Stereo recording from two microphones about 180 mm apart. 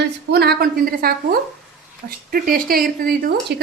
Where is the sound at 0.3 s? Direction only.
65° right (ahead or behind).